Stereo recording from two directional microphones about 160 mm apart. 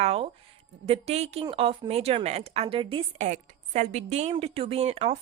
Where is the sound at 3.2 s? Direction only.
50° right (ahead or behind).